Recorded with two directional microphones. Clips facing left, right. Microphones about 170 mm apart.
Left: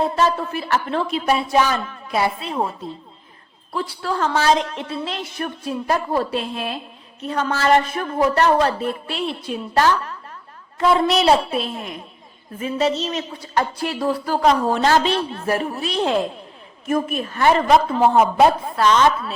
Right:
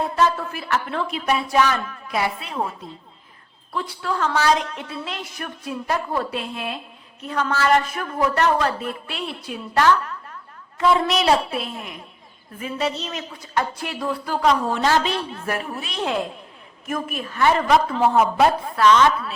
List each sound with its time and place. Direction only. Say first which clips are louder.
0.7 s a woman's voice: left 3 dB; 30° left (ahead or behind)